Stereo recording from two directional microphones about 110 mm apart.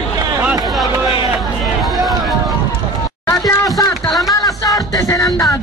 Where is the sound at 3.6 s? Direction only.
35° left (ahead or behind).